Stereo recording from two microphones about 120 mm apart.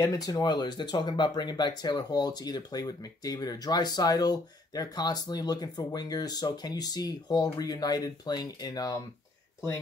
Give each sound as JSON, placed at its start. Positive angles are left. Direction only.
{"t": 0.1, "sound": "speech", "side_deg": 30}